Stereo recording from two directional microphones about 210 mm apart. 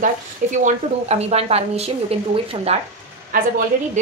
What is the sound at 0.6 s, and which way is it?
A woman's voice, 30° right (ahead or behind).